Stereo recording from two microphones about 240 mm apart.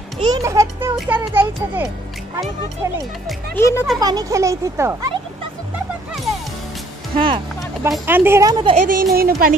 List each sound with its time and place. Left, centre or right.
0.2 s a child's voice: centre
3.3 s speech: centre
4.0 s a child's voice: centre
7.2 s speech: right
7.9 s a child's voice: centre
8.7 s speech: right